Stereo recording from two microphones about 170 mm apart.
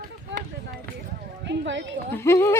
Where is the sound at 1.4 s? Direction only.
90° right.